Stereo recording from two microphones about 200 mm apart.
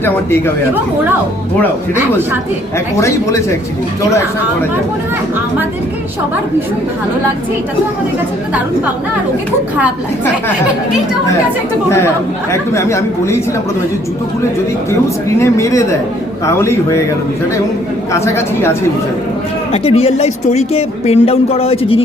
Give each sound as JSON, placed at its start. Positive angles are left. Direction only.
{"t": 0.0, "sound": "speech", "side_deg": 10}
{"t": 3.0, "sound": "speech", "side_deg": 15}
{"t": 11.9, "sound": "speech", "side_deg": 15}
{"t": 15.4, "sound": "speech", "side_deg": 15}
{"t": 18.1, "sound": "speech", "side_deg": 10}
{"t": 19.7, "sound": "speech", "side_deg": 30}